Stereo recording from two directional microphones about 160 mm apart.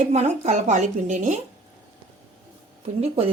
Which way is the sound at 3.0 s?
35° right (ahead or behind).